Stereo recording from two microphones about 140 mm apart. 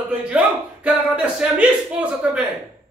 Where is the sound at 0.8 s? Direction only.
10° right (ahead or behind).